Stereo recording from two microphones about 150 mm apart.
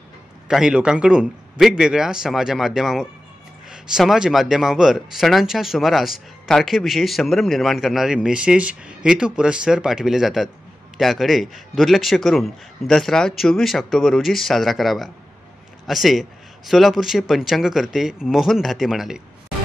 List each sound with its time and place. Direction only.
0.5 s speech: 5° right (ahead or behind)